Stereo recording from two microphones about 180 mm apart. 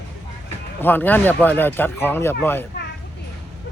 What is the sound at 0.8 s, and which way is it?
Speech, 10° left (ahead or behind).